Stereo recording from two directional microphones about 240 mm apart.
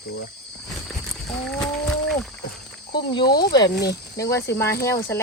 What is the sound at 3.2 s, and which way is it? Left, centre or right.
Speech, left.